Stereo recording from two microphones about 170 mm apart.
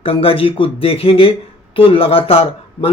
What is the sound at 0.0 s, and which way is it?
Speech, 35° left (ahead or behind).